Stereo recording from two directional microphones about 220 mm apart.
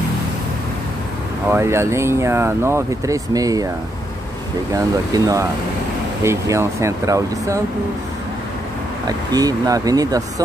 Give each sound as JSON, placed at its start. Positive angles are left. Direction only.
{"t": 1.5, "sound": "speech", "side_deg": -10}
{"t": 4.7, "sound": "speech", "side_deg": -15}
{"t": 9.0, "sound": "speech", "side_deg": -15}